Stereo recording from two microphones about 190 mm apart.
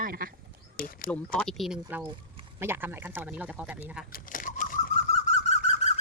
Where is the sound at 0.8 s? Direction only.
50° left (ahead or behind).